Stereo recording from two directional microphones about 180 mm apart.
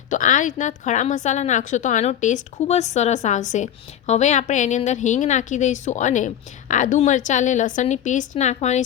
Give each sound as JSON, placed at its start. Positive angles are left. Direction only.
{"t": 0.1, "sound": "speech", "side_deg": 45}